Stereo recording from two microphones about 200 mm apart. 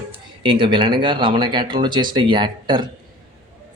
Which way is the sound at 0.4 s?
25° right (ahead or behind).